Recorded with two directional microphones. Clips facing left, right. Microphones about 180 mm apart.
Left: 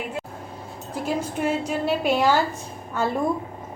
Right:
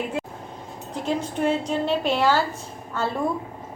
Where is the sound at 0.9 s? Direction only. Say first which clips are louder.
Even; 5° left (ahead or behind).